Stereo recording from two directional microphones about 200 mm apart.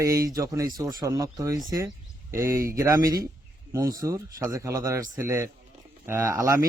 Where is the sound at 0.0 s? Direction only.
15° right (ahead or behind).